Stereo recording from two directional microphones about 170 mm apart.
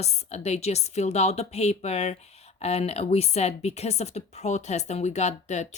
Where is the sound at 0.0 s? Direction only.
40° left (ahead or behind).